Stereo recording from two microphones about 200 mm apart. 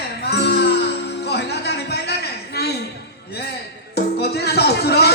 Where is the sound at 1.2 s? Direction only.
55° left (ahead or behind).